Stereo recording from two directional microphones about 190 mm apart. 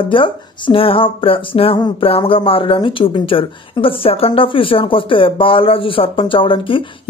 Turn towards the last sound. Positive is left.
turn(degrees=25)  # may be behind; listen again after turning